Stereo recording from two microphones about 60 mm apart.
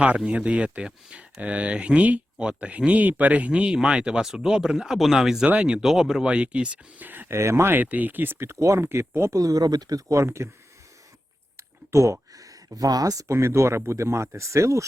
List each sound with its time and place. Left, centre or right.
0.3 s speech: right
7.0 s speech: right
7.3 s speech: right
7.7 s speech: right
8.4 s speech: right
8.8 s speech: right
9.4 s speech: right
10.2 s speech: right
11.5 s a sound: right
12.4 s speech: right